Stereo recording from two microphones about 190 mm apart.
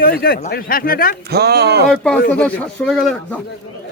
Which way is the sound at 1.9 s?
5° left (ahead or behind).